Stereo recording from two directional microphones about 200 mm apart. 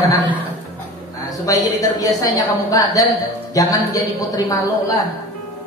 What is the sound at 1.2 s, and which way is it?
A woman's voice, 20° left (ahead or behind).